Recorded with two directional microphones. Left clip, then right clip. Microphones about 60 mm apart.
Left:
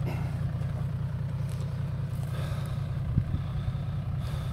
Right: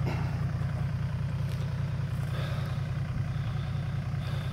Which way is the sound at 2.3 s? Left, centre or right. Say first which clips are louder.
Right 2 dB; centre.